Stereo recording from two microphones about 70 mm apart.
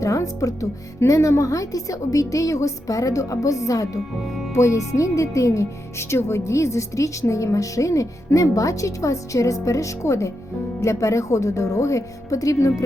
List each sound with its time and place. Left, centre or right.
0.0 s speech: left